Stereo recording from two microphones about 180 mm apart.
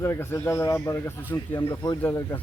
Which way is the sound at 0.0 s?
15° left (ahead or behind).